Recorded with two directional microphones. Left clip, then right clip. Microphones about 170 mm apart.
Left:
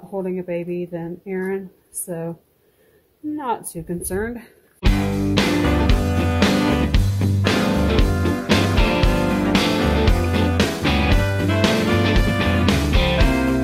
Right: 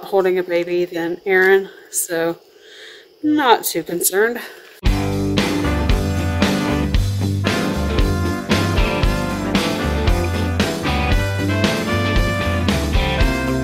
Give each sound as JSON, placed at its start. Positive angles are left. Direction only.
{"t": 0.1, "sound": "speech", "side_deg": -20}
{"t": 3.3, "sound": "speech", "side_deg": -35}
{"t": 4.2, "sound": "speech", "side_deg": -20}
{"t": 4.8, "sound": "music", "side_deg": 0}